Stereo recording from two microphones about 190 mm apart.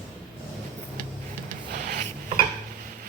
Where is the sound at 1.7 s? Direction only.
45° right (ahead or behind).